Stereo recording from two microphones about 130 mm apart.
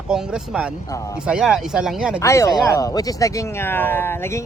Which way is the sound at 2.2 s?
25° left (ahead or behind).